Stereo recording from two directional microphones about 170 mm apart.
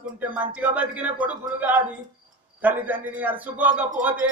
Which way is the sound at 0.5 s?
10° right (ahead or behind).